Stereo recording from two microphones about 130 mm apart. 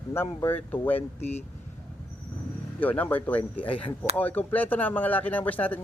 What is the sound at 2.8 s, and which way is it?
Speech, 15° left (ahead or behind).